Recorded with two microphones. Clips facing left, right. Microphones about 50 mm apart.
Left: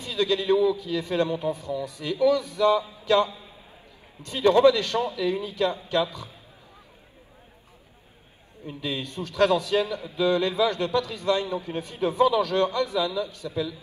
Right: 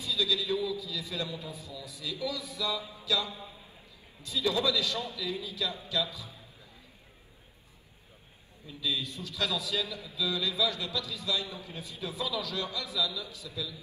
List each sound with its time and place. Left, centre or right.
0.0 s a man's voice: left
8.6 s a man's voice: left